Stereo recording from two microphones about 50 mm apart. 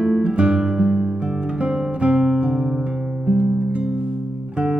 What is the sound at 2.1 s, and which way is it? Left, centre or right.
Music, centre.